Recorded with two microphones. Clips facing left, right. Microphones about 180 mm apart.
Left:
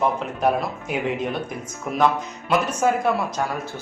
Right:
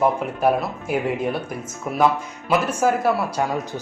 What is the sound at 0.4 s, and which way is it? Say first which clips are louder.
Speech: right 2 dB; 5° right (ahead or behind).